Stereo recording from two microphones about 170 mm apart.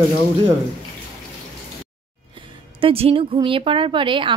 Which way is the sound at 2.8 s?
35° right (ahead or behind).